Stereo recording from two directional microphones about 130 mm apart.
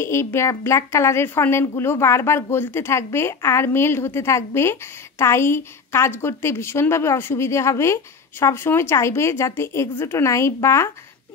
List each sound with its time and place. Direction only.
0.0 s a woman's voice: 20° left (ahead or behind)